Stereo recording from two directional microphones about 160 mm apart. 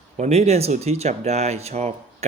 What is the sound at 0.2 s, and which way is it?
Speech, 40° right (ahead or behind).